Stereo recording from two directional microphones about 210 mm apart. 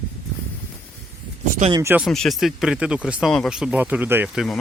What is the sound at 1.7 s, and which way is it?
Speech, 15° right (ahead or behind).